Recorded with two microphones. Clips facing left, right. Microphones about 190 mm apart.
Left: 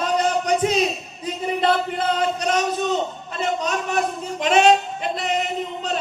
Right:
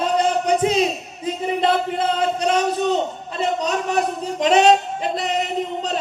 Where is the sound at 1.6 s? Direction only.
25° right (ahead or behind).